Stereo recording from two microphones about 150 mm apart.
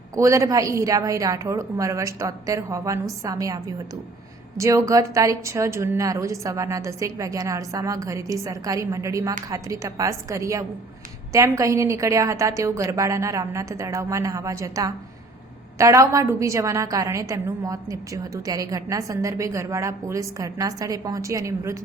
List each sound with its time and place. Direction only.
0.2 s a woman's voice: 20° right (ahead or behind)